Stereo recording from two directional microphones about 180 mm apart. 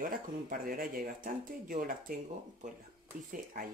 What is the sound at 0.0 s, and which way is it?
Speech, 50° right (ahead or behind).